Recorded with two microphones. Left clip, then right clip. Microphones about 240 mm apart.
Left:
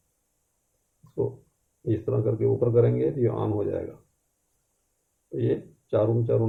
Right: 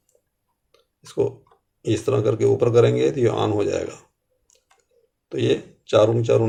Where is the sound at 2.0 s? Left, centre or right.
Right.